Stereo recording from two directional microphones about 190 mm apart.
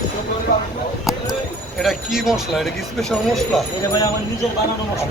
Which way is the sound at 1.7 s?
Centre (ahead or behind).